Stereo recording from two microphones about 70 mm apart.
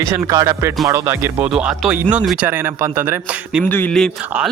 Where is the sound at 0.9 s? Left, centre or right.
Right.